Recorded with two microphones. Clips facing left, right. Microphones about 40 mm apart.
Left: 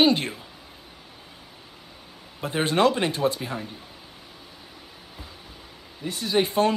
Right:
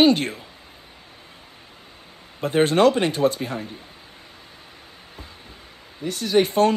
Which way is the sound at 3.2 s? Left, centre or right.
Centre.